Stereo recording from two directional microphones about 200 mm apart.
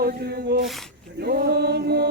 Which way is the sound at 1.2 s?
50° right (ahead or behind).